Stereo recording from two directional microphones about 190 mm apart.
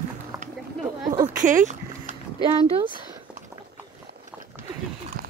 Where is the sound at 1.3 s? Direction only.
45° right (ahead or behind).